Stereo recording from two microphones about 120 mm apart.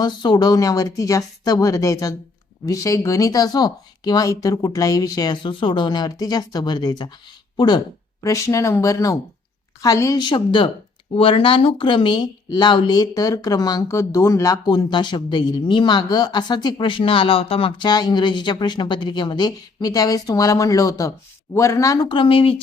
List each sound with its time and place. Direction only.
0.0 s speech: 35° left (ahead or behind)
8.2 s speech: 25° left (ahead or behind)
10.2 s speech: 40° left (ahead or behind); by 21.9 s 25° left (ahead or behind)
22.0 s speech: 45° left (ahead or behind)